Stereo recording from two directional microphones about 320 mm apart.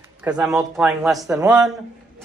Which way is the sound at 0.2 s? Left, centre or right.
Centre.